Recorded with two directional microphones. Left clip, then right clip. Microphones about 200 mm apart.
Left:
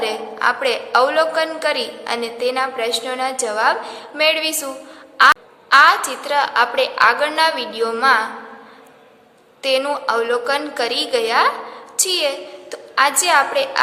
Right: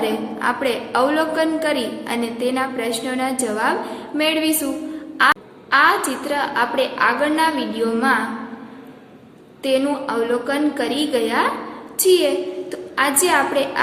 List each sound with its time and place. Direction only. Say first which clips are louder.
0.0 s a woman's voice: left 2 dB; 20° left (ahead or behind)
9.6 s a woman's voice: left 2 dB; 25° left (ahead or behind)